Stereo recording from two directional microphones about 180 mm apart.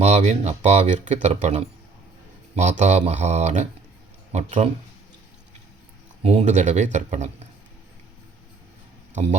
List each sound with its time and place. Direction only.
0.0 s speech: 35° right (ahead or behind)
6.2 s speech: 40° right (ahead or behind)
9.1 s speech: 40° right (ahead or behind)